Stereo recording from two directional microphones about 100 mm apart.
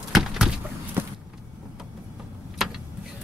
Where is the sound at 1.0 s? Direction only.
20° right (ahead or behind).